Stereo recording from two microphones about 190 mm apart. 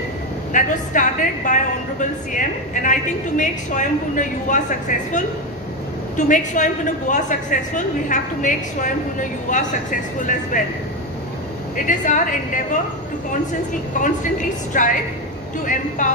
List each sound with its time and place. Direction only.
0.5 s a woman's voice: 45° left (ahead or behind)
11.7 s a woman's voice: 45° left (ahead or behind)
14.0 s a woman's voice: 40° left (ahead or behind)
16.0 s a woman's voice: 45° left (ahead or behind)